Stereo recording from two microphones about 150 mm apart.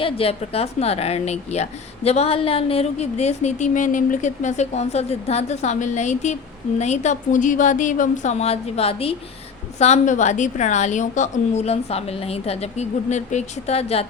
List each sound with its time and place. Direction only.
0.0 s a woman's voice: 40° left (ahead or behind)